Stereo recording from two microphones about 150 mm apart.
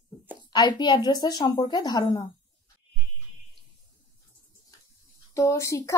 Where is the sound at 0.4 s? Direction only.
30° left (ahead or behind).